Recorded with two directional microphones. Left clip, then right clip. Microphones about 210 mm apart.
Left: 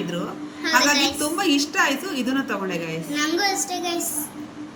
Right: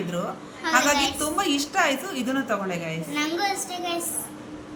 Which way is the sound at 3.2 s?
15° right (ahead or behind).